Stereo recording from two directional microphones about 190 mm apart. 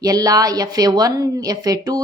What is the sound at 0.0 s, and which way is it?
A woman's voice, 20° right (ahead or behind).